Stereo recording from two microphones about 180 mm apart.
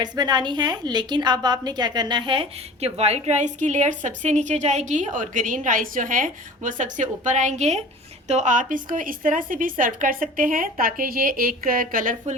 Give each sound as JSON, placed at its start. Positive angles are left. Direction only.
{"t": 0.0, "sound": "a woman's voice", "side_deg": -25}